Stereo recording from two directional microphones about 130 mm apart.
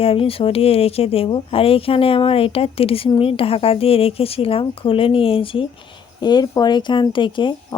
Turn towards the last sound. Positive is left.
turn(degrees=40)  # may be behind; listen again after turning